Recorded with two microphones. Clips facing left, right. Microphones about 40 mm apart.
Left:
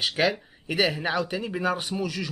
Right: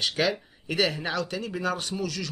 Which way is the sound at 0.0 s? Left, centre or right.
Centre.